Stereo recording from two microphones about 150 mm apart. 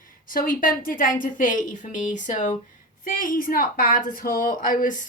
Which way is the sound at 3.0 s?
65° left (ahead or behind).